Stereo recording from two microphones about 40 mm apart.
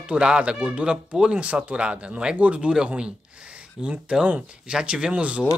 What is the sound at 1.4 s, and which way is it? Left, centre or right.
Speech, right.